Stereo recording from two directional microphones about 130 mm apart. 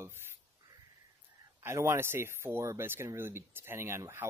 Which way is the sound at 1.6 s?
20° right (ahead or behind).